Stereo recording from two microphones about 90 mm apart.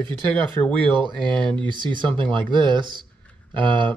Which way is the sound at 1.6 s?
60° right (ahead or behind).